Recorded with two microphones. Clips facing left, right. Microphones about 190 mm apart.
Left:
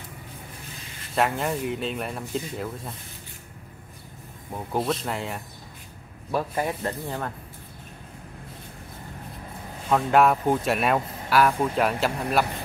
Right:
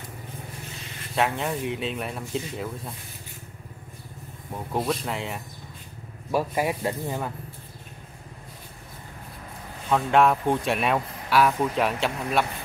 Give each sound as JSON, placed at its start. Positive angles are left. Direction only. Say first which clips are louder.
{"t": 1.1, "sound": "speech", "louder": "left 1 dB", "side_deg": 0}
{"t": 4.7, "sound": "speech", "louder": "left 1 dB", "side_deg": 0}
{"t": 9.8, "sound": "speech", "louder": "left 1 dB", "side_deg": 0}